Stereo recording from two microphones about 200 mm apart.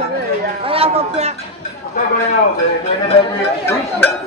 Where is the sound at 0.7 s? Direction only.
30° right (ahead or behind).